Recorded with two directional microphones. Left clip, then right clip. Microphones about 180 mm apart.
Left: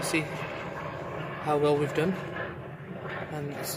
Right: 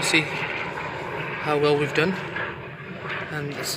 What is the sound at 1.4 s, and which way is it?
Speech, 10° left (ahead or behind).